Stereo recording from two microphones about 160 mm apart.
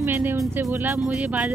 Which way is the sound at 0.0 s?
15° right (ahead or behind).